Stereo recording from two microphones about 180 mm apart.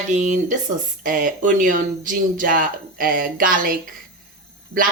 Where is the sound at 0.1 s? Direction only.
45° right (ahead or behind).